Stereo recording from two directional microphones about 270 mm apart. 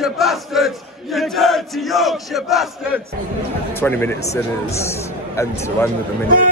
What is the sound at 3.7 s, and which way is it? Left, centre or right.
A man's voice, centre.